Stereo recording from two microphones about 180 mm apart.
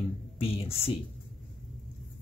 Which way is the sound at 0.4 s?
30° left (ahead or behind).